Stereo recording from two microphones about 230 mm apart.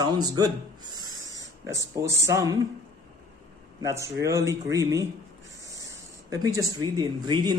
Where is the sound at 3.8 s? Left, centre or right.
Centre.